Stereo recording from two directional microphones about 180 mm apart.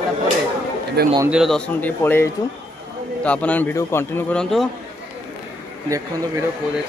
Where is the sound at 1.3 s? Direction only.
Centre (ahead or behind).